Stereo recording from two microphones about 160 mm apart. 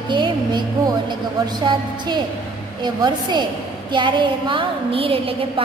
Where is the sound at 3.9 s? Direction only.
30° right (ahead or behind).